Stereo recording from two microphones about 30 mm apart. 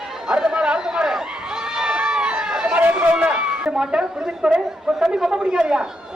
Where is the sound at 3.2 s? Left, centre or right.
Right.